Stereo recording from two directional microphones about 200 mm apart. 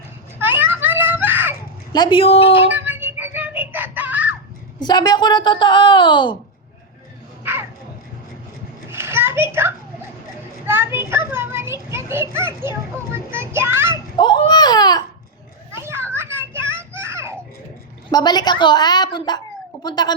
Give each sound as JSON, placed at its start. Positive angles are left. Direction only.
{"t": 0.3, "sound": "children playing", "side_deg": -10}
{"t": 1.9, "sound": "a woman's voice", "side_deg": 25}
{"t": 2.6, "sound": "music", "side_deg": -10}
{"t": 4.8, "sound": "a woman's voice", "side_deg": 20}
{"t": 7.4, "sound": "a sound", "side_deg": -10}
{"t": 8.9, "sound": "children playing", "side_deg": -10}
{"t": 13.1, "sound": "a child's voice", "side_deg": -10}
{"t": 14.2, "sound": "speech", "side_deg": 20}
{"t": 15.7, "sound": "children playing", "side_deg": -10}
{"t": 18.1, "sound": "a woman's voice", "side_deg": 20}